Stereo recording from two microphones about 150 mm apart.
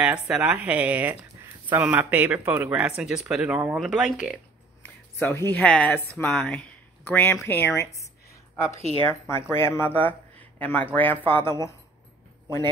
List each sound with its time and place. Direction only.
0.0 s speech: 5° right (ahead or behind)
4.8 s speech: 15° left (ahead or behind)